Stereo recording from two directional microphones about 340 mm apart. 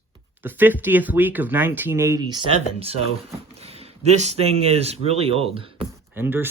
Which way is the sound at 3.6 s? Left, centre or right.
Centre.